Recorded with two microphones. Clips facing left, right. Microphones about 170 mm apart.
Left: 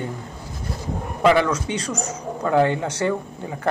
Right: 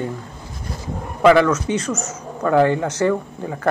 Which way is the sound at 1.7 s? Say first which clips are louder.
Right 4 dB; 30° left (ahead or behind).